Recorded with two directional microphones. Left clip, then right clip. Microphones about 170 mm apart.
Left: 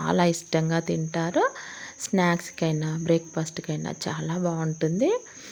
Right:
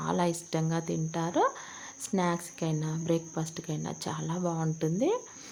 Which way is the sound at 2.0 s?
30° left (ahead or behind).